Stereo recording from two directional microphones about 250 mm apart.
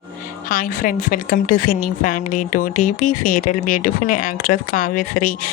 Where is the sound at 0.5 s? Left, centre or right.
Left.